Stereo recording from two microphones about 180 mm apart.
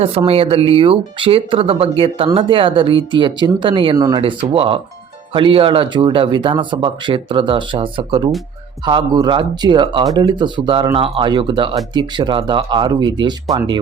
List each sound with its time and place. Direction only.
0.3 s speech: 30° right (ahead or behind)
3.9 s speech: 20° right (ahead or behind)
4.2 s speech: 30° right (ahead or behind)